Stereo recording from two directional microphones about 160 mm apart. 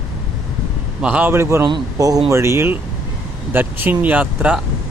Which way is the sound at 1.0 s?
10° right (ahead or behind).